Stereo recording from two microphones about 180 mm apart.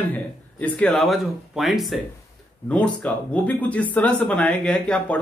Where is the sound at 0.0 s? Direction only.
10° left (ahead or behind).